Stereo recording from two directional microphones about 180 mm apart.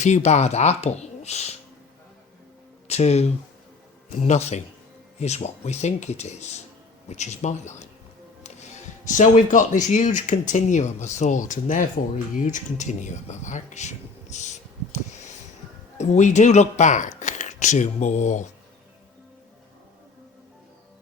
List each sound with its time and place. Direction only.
0.0 s speech: 40° left (ahead or behind)
2.8 s speech: 35° left (ahead or behind)
9.0 s speech: 45° left (ahead or behind)
16.0 s speech: 40° left (ahead or behind)